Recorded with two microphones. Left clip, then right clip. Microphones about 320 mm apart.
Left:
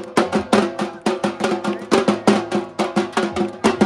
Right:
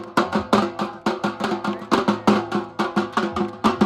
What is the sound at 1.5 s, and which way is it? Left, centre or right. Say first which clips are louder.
Music: left 3 dB; right.